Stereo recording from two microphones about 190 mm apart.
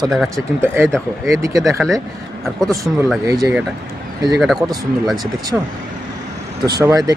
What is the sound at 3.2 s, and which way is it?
Speech, 20° right (ahead or behind).